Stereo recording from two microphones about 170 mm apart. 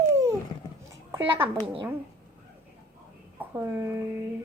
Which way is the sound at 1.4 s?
30° right (ahead or behind).